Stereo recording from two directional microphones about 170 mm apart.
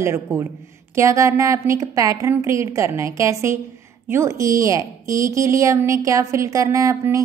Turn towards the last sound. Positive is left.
turn(degrees=-20)  # may be behind; listen again after turning